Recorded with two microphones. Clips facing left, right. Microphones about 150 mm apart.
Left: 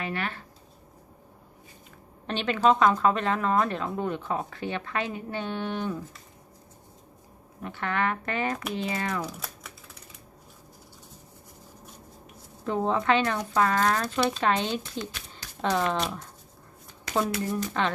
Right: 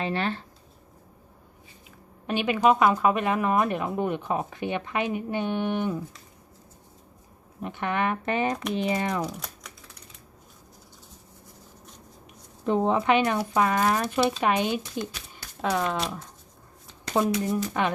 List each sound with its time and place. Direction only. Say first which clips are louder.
0.0 s speech: right 4 dB; 30° right (ahead or behind)
2.2 s a woman's voice: right 1 dB; 10° right (ahead or behind)
7.6 s a woman's voice: right 1 dB; 20° right (ahead or behind)
9.4 s typing: left 1 dB; 5° left (ahead or behind)
12.6 s a woman's voice: right 3 dB; 20° right (ahead or behind); by 16.2 s centre (ahead or behind)
17.4 s a woman's voice: right 2 dB; 10° right (ahead or behind)